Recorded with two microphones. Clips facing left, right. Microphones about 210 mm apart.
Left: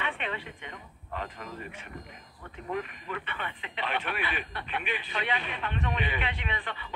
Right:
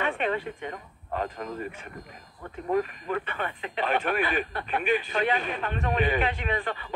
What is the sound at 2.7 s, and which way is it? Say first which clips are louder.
Speech: right 8 dB; 40° right (ahead or behind).